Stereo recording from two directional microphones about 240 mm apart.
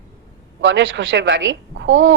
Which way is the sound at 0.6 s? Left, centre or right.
Right.